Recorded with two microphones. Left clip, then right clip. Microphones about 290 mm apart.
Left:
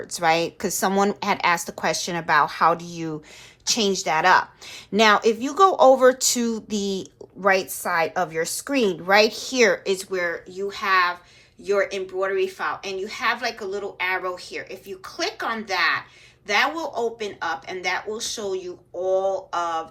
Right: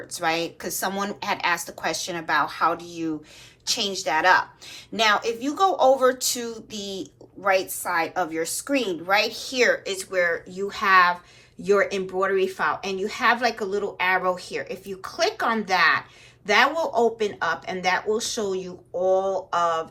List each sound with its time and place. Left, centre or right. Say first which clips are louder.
0.1 s a woman's voice: left 4 dB; left; by 19.9 s centre